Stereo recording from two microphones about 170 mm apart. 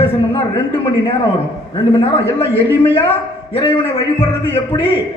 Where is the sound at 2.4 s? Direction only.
35° left (ahead or behind).